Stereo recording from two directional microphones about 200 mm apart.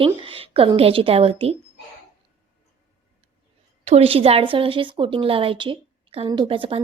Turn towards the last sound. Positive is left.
turn(degrees=-30)  # may be behind; listen again after turning